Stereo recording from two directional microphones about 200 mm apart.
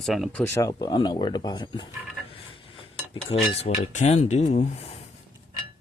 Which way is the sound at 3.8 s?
35° left (ahead or behind).